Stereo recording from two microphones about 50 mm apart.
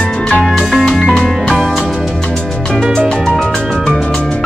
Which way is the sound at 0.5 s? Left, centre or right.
Centre.